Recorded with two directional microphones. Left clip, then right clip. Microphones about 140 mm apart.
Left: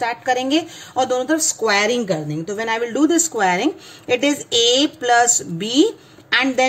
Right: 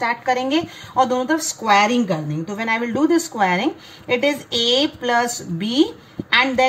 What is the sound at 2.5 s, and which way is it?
A woman's voice, 90° left.